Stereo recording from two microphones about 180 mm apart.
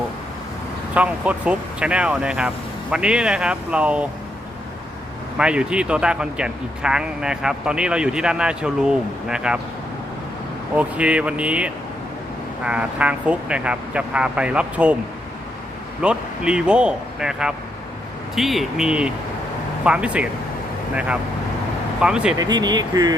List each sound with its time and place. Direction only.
0.9 s speech: 10° right (ahead or behind)
5.4 s speech: 5° right (ahead or behind)
10.8 s speech: 5° right (ahead or behind)
16.0 s speech: 5° right (ahead or behind)
22.0 s speech: 5° right (ahead or behind)
22.4 s speech: 25° right (ahead or behind)